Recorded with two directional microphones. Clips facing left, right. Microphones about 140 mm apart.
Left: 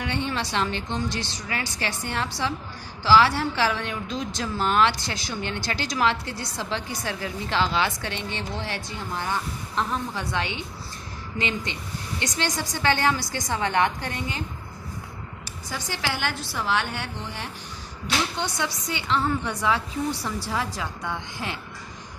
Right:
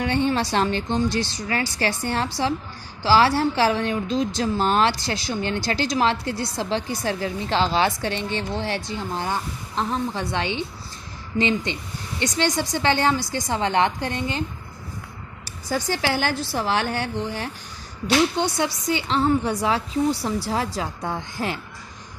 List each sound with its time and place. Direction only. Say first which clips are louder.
0.0 s a woman's voice: right 6 dB; 35° right (ahead or behind)
15.7 s a woman's voice: right 7 dB; 40° right (ahead or behind)